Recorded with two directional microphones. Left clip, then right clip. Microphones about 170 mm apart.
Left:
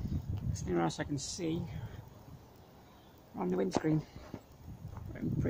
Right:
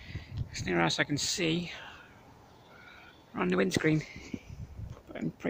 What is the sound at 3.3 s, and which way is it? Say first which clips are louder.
Speech: right 5 dB; 30° right (ahead or behind).